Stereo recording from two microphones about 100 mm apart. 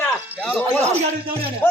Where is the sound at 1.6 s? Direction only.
15° left (ahead or behind).